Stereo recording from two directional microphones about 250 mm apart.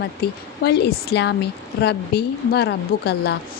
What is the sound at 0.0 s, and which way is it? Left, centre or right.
Speech, left.